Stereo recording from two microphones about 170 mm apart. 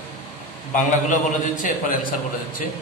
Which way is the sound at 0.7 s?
50° left (ahead or behind).